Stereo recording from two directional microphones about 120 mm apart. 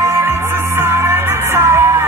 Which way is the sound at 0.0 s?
25° right (ahead or behind).